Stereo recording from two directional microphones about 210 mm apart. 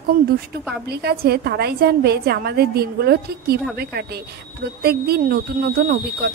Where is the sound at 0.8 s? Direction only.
50° right (ahead or behind).